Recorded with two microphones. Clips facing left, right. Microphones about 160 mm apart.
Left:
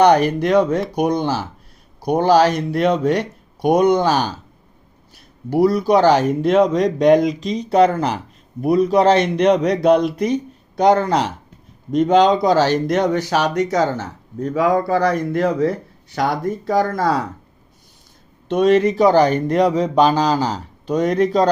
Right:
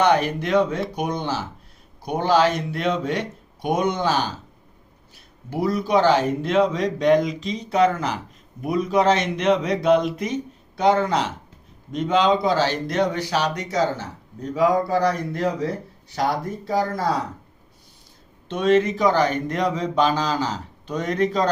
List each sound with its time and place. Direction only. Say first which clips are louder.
0.0 s speech: left 6 dB; 40° left (ahead or behind); by 15.4 s 55° left (ahead or behind)
16.6 s speech: left 4 dB; 55° left (ahead or behind)
18.4 s speech: left 4 dB; 40° left (ahead or behind)